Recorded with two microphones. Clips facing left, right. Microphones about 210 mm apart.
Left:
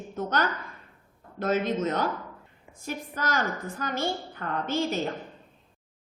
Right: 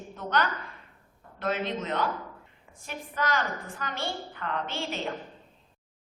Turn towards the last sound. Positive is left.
turn(degrees=40)  # may be behind; listen again after turning